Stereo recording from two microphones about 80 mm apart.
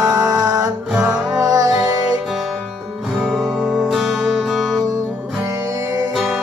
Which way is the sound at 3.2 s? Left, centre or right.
Centre.